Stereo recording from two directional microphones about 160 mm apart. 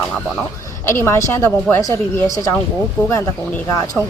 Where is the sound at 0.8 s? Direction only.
15° left (ahead or behind).